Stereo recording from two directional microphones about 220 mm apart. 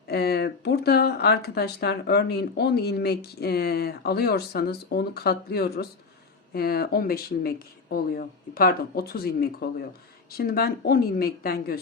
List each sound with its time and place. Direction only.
0.1 s speech: 45° left (ahead or behind)